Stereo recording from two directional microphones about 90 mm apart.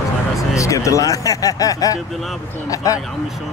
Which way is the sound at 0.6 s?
35° left (ahead or behind).